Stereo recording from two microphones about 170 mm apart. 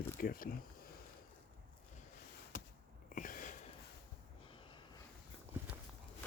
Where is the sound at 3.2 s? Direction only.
50° left (ahead or behind).